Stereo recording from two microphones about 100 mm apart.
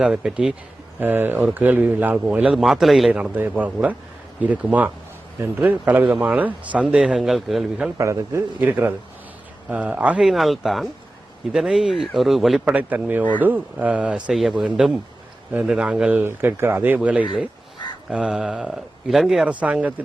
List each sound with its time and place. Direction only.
0.0 s speech: 10° right (ahead or behind)
0.9 s speech: 20° right (ahead or behind)
2.6 s speech: 5° right (ahead or behind)
3.1 s speech: 10° right (ahead or behind)
7.9 s speech: 30° right (ahead or behind)
9.6 s speech: 15° right (ahead or behind)
12.6 s speech: 15° right (ahead or behind)